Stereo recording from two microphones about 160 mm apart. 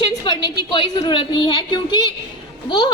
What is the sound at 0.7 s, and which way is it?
A woman's voice, 30° left (ahead or behind).